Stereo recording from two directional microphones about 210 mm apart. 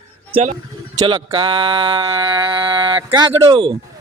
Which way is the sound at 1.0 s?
25° right (ahead or behind).